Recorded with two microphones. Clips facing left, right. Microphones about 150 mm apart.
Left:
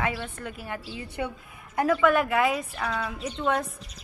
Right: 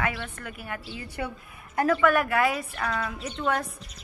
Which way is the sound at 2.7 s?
5° left (ahead or behind).